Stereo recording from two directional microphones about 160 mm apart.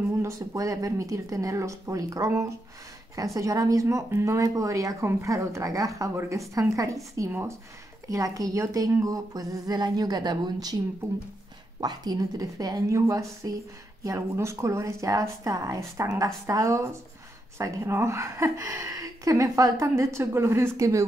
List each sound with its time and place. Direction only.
0.2 s a woman's voice: 20° right (ahead or behind)
11.8 s a woman's voice: 25° right (ahead or behind)